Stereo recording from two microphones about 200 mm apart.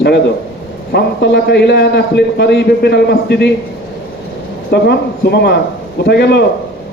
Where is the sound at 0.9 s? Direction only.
55° left (ahead or behind).